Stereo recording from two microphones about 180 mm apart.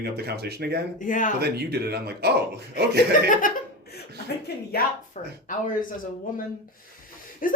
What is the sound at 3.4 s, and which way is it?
Speech, 50° left (ahead or behind).